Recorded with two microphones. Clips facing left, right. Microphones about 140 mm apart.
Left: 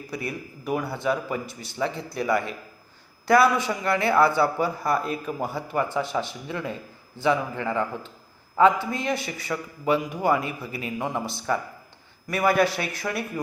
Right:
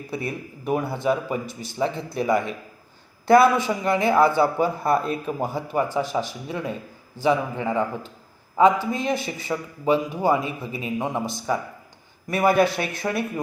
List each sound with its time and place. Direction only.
0.1 s a man's voice: 25° right (ahead or behind)